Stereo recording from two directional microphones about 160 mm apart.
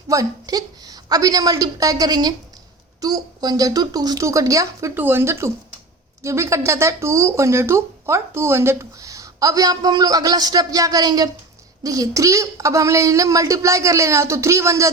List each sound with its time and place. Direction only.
0.1 s a woman's voice: 20° right (ahead or behind)